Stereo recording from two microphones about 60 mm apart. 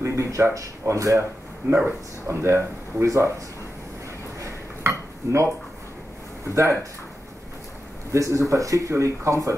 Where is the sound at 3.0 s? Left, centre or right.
Right.